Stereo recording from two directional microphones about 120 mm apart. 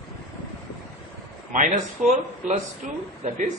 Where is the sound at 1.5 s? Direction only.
90° right.